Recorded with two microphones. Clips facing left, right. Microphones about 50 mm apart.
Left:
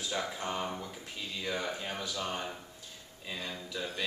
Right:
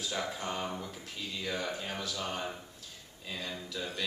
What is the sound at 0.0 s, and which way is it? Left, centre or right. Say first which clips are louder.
Speech: even; centre.